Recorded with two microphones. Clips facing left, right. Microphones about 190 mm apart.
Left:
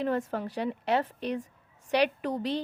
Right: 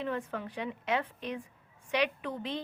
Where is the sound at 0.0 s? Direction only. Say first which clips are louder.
Left 6 dB; 40° left (ahead or behind).